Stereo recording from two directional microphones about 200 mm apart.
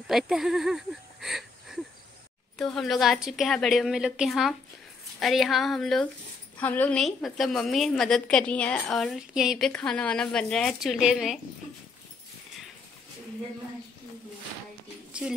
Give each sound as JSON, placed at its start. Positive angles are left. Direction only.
{"t": 0.1, "sound": "a woman's voice", "side_deg": 0}